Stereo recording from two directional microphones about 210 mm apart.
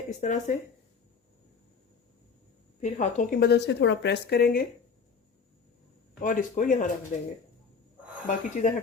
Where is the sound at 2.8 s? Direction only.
35° left (ahead or behind).